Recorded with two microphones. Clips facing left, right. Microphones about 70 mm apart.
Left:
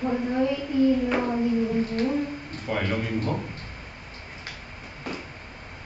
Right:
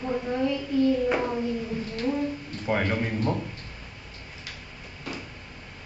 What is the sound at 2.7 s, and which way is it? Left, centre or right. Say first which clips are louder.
Speech: right 2 dB; right.